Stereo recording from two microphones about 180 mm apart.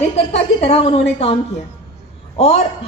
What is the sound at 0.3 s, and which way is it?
A man's voice, 35° left (ahead or behind).